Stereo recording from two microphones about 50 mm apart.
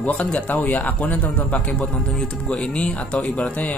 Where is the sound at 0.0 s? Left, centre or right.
Left.